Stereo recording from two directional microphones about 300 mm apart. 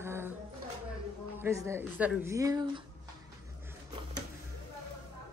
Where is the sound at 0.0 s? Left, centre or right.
Centre.